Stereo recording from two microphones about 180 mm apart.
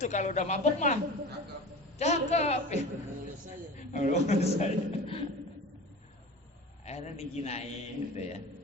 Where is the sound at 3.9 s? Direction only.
40° left (ahead or behind).